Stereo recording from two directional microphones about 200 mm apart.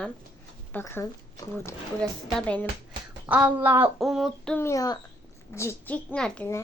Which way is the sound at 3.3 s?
5° right (ahead or behind).